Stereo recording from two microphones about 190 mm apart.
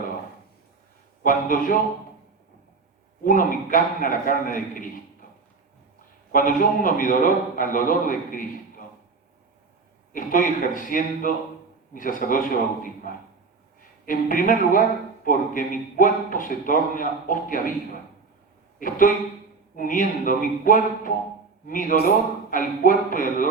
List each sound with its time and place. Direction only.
1.2 s a man's voice: 45° left (ahead or behind)
3.2 s a man's voice: 45° left (ahead or behind)
6.3 s a man's voice: 45° left (ahead or behind)
10.1 s a man's voice: 45° left (ahead or behind)
18.8 s a man's voice: 45° left (ahead or behind)